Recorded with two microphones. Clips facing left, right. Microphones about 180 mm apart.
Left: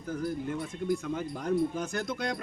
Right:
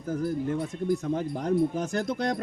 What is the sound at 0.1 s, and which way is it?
Speech, 45° right (ahead or behind).